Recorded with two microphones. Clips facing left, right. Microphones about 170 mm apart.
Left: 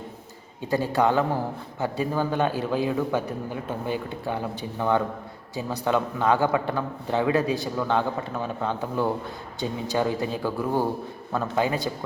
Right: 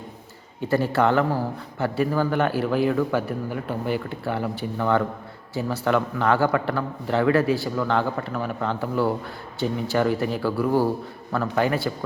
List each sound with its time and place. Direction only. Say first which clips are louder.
0.7 s a man's voice: right 2 dB; 15° left (ahead or behind)